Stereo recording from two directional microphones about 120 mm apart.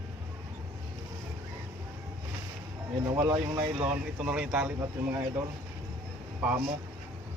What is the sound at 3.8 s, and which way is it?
Speech, 10° right (ahead or behind).